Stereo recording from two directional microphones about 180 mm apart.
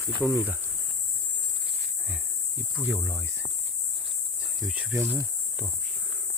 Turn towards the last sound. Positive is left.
turn(degrees=-10)  # may be behind; listen again after turning